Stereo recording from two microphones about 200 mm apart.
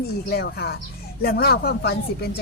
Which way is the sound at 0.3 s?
55° left (ahead or behind).